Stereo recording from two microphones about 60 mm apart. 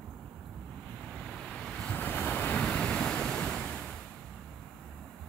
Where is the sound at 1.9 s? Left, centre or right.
Left.